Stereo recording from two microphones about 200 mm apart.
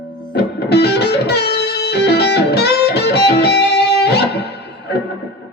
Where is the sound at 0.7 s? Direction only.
55° left (ahead or behind).